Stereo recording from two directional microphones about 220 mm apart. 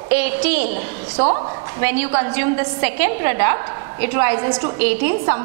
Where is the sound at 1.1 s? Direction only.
30° right (ahead or behind).